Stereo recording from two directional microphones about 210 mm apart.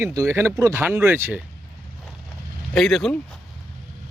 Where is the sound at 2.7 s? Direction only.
Centre (ahead or behind).